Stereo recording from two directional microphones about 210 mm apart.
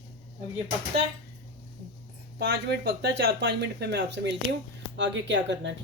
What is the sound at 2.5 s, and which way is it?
Speech, 55° right (ahead or behind).